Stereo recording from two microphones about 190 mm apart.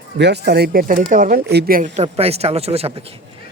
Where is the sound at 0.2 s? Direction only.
60° right (ahead or behind).